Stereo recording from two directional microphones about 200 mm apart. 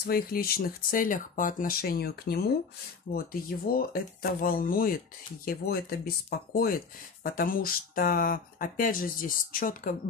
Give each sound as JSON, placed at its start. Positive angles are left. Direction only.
{"t": 0.0, "sound": "speech", "side_deg": 50}